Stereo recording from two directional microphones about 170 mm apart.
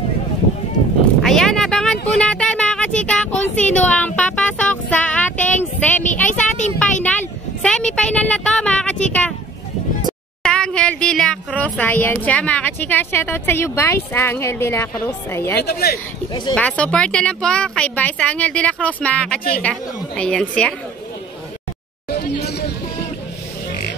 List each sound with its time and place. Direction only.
1.2 s a sound: 5° left (ahead or behind)
3.0 s music: 5° left (ahead or behind)
6.8 s a sound: 5° left (ahead or behind)
10.4 s speech: 5° left (ahead or behind)
15.6 s speech: 65° left (ahead or behind)
16.5 s a woman's voice: 5° left (ahead or behind)